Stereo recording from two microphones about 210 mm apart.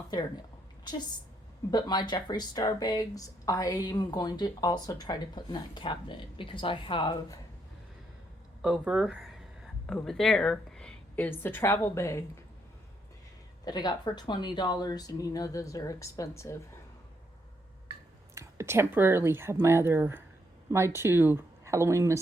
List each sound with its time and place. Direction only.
0.1 s speech: 20° left (ahead or behind)
8.6 s speech: 5° right (ahead or behind); by 12.2 s 15° left (ahead or behind)
13.7 s speech: 20° left (ahead or behind)
18.3 s speech: 10° right (ahead or behind)